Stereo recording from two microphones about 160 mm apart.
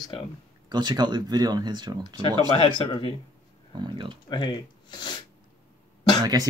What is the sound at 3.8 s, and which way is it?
Speech, 30° right (ahead or behind).